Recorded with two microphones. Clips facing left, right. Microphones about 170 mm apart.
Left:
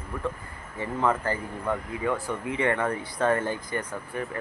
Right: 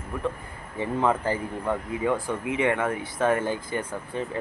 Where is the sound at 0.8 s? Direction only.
15° right (ahead or behind).